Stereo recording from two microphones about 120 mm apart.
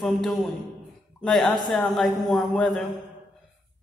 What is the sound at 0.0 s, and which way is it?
A man's voice, 5° left (ahead or behind).